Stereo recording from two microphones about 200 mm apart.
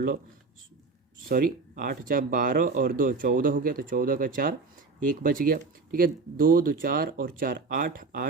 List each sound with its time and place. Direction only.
1.3 s speech: 45° right (ahead or behind)